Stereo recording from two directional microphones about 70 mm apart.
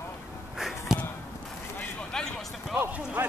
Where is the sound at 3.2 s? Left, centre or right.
Right.